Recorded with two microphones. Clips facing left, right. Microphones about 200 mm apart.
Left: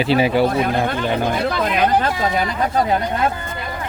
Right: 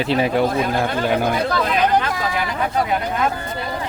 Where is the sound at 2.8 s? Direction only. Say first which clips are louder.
Left 2 dB; 35° left (ahead or behind).